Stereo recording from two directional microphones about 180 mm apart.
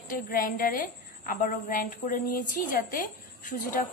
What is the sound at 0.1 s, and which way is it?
A woman's voice, 50° left (ahead or behind).